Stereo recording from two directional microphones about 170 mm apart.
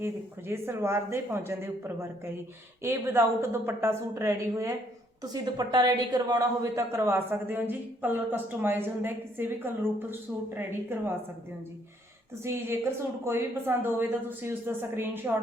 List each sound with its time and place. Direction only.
0.0 s a woman's voice: 15° right (ahead or behind)
12.4 s a woman's voice: 15° right (ahead or behind)